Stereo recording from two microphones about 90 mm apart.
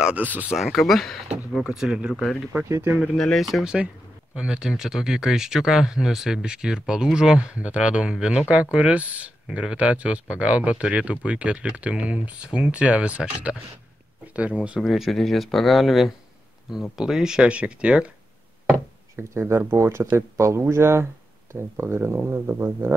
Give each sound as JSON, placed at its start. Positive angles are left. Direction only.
{"t": 0.0, "sound": "speech", "side_deg": -15}
{"t": 0.5, "sound": "speech", "side_deg": 0}
{"t": 3.0, "sound": "speech", "side_deg": 5}
{"t": 14.8, "sound": "speech", "side_deg": 0}
{"t": 19.1, "sound": "speech", "side_deg": -30}